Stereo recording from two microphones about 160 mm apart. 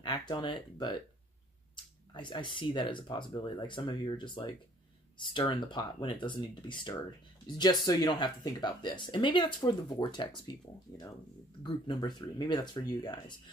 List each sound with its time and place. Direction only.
0.0 s speech: 25° left (ahead or behind)
2.1 s speech: 30° left (ahead or behind)
11.6 s speech: 30° left (ahead or behind)